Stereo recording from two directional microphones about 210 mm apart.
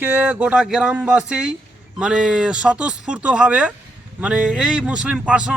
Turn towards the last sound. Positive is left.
turn(degrees=-5)  # may be behind; listen again after turning